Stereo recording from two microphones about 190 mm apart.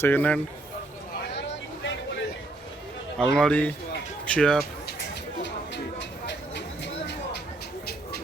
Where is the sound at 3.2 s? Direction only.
5° left (ahead or behind).